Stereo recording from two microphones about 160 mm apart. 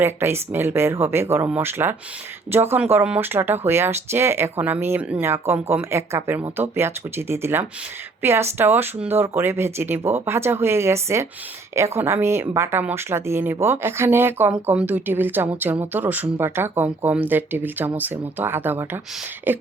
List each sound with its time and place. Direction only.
0.0 s speech: 15° right (ahead or behind)